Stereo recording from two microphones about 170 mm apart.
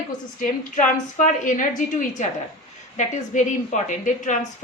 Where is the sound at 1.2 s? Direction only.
45° left (ahead or behind).